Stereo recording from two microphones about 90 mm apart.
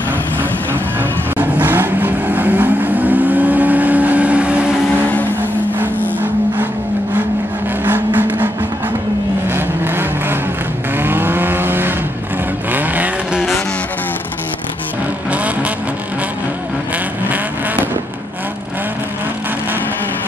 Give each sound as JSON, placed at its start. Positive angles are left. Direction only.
{"t": 0.9, "sound": "vehicle", "side_deg": -20}
{"t": 7.8, "sound": "vehicle", "side_deg": -20}
{"t": 9.5, "sound": "vehicle", "side_deg": -25}
{"t": 15.3, "sound": "vehicle", "side_deg": -15}